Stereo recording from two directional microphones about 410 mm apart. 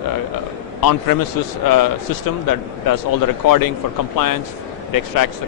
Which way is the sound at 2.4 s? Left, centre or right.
Left.